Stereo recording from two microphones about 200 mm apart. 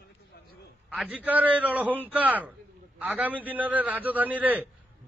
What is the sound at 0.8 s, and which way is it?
A man's voice, 5° right (ahead or behind).